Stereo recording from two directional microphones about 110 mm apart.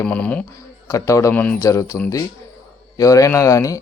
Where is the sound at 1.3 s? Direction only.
15° left (ahead or behind).